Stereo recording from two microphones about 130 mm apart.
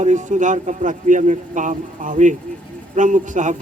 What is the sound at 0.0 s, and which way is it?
A man's voice, 65° right (ahead or behind).